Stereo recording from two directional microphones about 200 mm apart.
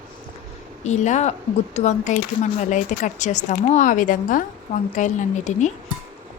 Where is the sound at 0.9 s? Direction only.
35° left (ahead or behind).